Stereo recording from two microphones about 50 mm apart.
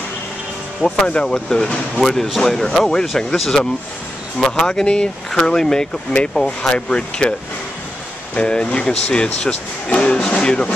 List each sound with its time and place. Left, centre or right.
1.0 s speech: centre
6.7 s speech: left
8.4 s speech: left
10.2 s a sound: centre